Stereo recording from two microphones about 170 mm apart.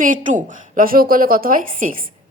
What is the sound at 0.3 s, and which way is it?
A woman's voice, 50° right (ahead or behind).